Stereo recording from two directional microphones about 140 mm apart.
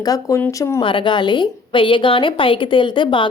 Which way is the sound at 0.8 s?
35° left (ahead or behind).